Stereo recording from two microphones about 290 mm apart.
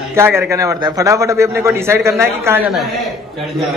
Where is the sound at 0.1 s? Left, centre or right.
Centre.